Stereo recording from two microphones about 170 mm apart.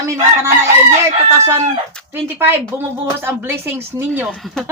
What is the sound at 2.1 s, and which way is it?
Fowl, 15° right (ahead or behind).